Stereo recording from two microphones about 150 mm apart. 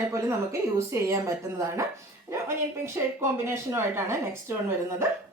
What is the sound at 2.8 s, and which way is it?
Speech, 15° right (ahead or behind).